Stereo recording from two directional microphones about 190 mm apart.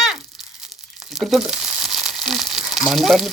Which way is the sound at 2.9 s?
Centre (ahead or behind).